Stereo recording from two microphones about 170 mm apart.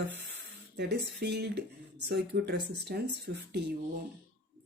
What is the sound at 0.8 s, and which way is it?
Speech, 80° right.